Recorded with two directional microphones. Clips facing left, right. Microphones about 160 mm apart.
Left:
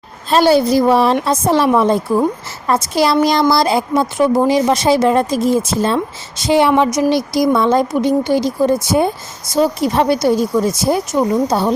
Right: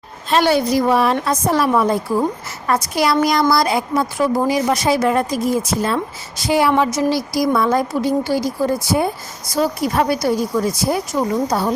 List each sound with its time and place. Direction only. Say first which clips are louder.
0.3 s speech: left 4 dB; 35° left (ahead or behind)